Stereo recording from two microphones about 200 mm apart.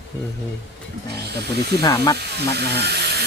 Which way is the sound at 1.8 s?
20° left (ahead or behind).